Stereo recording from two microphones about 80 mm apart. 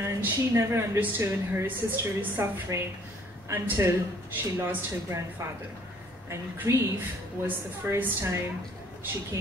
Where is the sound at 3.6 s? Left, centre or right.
Right.